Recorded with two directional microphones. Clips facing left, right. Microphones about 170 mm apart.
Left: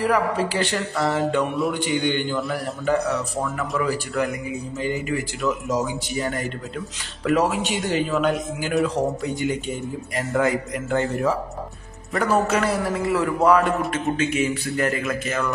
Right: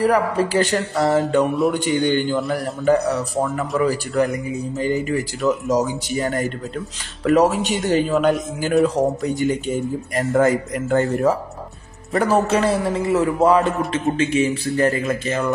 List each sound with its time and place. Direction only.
0.0 s a man's voice: 40° right (ahead or behind)
12.1 s a man's voice: 35° right (ahead or behind)